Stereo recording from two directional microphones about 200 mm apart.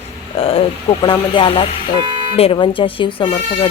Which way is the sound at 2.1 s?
35° right (ahead or behind).